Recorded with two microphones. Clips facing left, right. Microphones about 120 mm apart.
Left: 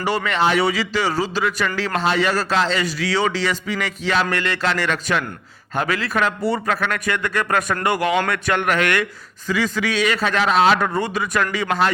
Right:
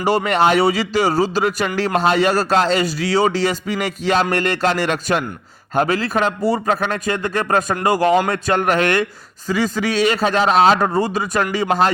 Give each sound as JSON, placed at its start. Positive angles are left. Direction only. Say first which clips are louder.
{"t": 0.0, "sound": "speech", "louder": "right 4 dB", "side_deg": -40}
{"t": 5.9, "sound": "a man's voice", "louder": "right 3 dB", "side_deg": -30}